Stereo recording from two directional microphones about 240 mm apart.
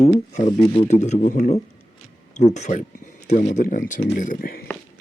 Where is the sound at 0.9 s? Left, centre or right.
Left.